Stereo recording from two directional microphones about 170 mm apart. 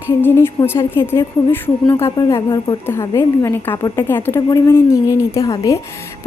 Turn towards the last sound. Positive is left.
turn(degrees=20)  # may be behind; listen again after turning